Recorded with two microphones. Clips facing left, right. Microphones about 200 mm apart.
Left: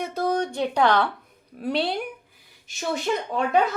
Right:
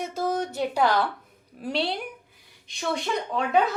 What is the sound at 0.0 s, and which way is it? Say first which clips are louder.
Speech: left 3 dB; centre (ahead or behind).